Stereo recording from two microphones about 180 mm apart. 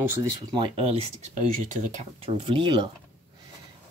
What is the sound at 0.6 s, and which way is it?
Speech, 35° right (ahead or behind).